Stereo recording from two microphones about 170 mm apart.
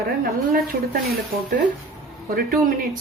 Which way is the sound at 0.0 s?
65° right (ahead or behind).